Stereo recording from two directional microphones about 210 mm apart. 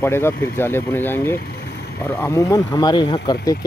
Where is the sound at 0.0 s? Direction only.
10° left (ahead or behind).